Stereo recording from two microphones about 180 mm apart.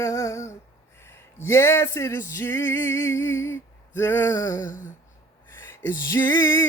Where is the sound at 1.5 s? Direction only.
15° left (ahead or behind).